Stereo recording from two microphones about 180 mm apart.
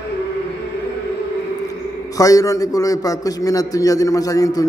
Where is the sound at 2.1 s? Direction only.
20° left (ahead or behind).